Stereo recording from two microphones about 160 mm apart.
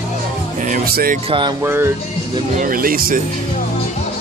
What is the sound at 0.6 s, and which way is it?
Music, 60° right (ahead or behind).